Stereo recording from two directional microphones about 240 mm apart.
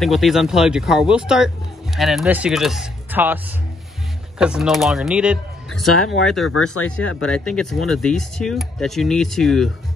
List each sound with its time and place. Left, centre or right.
0.0 s speech: centre
6.5 s speech: left
7.2 s speech: centre